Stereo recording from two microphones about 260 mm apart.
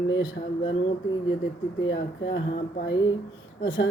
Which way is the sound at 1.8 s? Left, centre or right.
Left.